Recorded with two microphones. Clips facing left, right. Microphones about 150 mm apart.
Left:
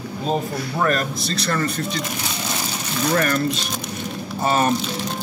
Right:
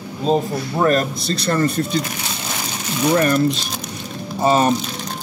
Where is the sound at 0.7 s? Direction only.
25° right (ahead or behind).